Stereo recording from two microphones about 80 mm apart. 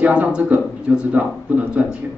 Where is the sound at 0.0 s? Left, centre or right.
Centre.